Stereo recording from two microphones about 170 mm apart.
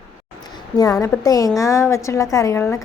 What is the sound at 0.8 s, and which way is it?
A woman's voice, 20° left (ahead or behind).